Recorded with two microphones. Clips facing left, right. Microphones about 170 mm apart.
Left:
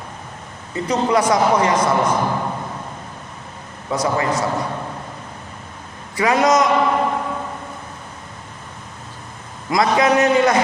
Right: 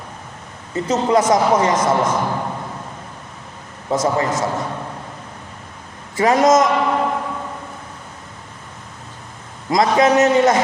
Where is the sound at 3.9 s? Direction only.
45° right (ahead or behind).